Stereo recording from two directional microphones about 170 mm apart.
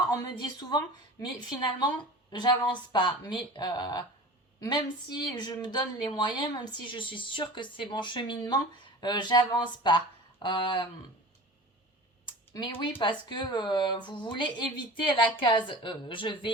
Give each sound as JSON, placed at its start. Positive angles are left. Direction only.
{"t": 0.1, "sound": "speech", "side_deg": 25}
{"t": 10.4, "sound": "speech", "side_deg": 30}
{"t": 12.2, "sound": "a sound", "side_deg": 30}
{"t": 12.8, "sound": "speech", "side_deg": 30}